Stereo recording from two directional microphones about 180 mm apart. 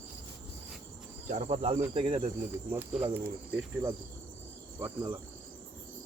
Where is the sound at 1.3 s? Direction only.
35° right (ahead or behind).